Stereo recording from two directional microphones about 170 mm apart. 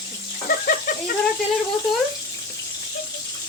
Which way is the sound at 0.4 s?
55° left (ahead or behind).